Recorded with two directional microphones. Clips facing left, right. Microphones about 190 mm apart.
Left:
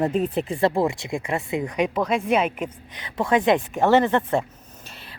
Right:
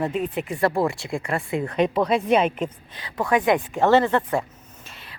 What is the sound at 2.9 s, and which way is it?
Speech, 20° left (ahead or behind).